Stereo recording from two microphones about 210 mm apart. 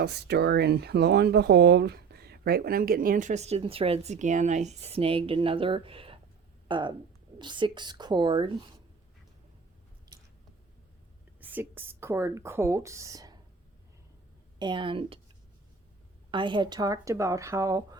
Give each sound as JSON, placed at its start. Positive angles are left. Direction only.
{"t": 0.0, "sound": "speech", "side_deg": -50}
{"t": 11.3, "sound": "speech", "side_deg": -10}
{"t": 14.6, "sound": "speech", "side_deg": -25}
{"t": 16.3, "sound": "speech", "side_deg": -20}